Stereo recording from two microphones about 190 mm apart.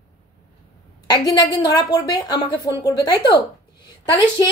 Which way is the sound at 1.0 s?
20° left (ahead or behind).